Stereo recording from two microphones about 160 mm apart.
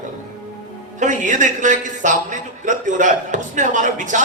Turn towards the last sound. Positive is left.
turn(degrees=-50)  # may be behind; listen again after turning